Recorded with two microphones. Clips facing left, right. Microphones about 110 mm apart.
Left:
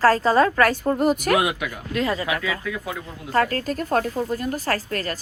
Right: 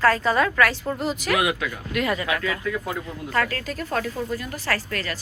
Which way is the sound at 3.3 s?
40° left (ahead or behind).